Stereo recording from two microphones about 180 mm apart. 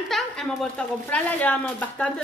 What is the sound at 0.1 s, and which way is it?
Speech, centre (ahead or behind).